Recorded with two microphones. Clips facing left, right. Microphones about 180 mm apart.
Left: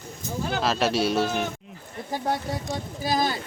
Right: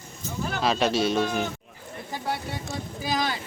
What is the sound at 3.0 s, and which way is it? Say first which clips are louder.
Speech: left 3 dB; 40° left (ahead or behind).